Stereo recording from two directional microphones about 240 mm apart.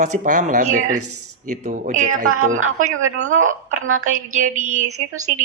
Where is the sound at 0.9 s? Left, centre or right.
Right.